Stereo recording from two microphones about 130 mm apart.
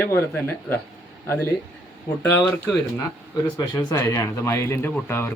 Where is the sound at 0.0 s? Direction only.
15° left (ahead or behind).